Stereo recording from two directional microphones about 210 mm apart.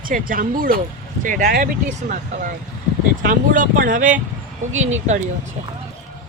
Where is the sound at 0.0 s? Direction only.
40° right (ahead or behind).